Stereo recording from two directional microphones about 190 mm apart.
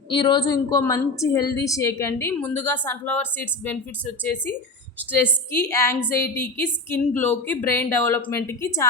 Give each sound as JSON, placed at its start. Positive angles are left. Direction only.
{"t": 0.1, "sound": "a woman's voice", "side_deg": 25}